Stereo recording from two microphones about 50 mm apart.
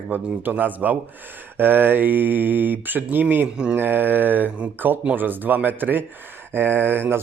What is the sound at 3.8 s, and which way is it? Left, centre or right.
Speech, right.